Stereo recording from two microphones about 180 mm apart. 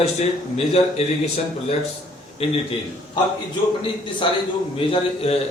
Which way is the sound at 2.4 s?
35° left (ahead or behind).